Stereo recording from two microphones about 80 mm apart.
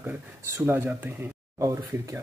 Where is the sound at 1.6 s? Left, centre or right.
Right.